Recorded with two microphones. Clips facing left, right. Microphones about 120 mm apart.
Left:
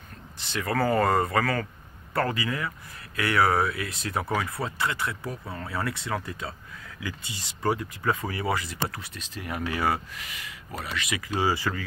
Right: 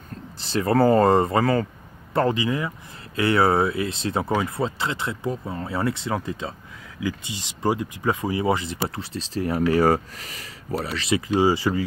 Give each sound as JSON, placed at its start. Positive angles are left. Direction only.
{"t": 0.4, "sound": "speech", "side_deg": -35}
{"t": 11.2, "sound": "speech", "side_deg": -15}